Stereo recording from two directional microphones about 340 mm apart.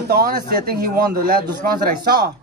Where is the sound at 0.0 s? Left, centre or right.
Right.